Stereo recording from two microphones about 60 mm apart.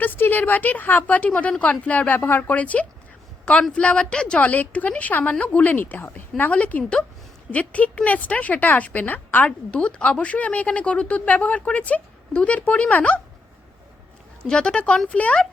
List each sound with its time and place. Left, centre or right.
0.0 s speech: left
14.4 s speech: centre